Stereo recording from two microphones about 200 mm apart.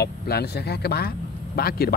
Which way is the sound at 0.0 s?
55° left (ahead or behind).